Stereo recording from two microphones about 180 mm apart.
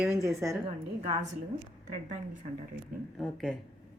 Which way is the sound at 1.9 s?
45° right (ahead or behind).